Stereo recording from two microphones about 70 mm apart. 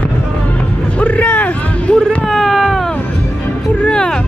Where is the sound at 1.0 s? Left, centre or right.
Left.